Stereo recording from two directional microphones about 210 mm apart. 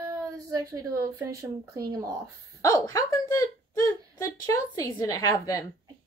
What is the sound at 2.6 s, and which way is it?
A woman's voice, 20° left (ahead or behind).